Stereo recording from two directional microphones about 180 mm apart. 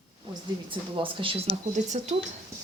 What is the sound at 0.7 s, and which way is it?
Speech, 30° right (ahead or behind).